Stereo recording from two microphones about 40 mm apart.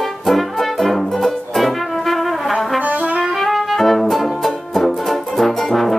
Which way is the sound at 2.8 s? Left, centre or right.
Right.